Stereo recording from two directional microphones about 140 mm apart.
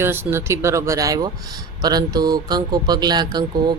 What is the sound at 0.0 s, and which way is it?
Speech, 20° right (ahead or behind).